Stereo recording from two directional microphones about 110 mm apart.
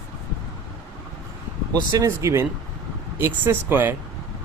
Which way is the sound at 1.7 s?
30° right (ahead or behind).